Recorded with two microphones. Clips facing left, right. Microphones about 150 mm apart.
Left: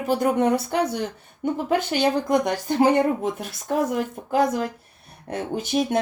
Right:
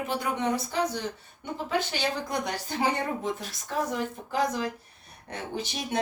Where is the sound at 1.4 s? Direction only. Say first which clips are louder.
Left 7 dB; 50° left (ahead or behind).